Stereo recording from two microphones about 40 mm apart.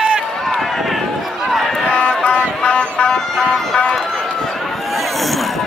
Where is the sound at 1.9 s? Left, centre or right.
Left.